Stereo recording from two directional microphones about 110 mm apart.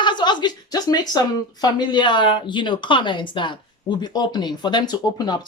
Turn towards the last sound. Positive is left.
turn(degrees=40)  # may be behind; listen again after turning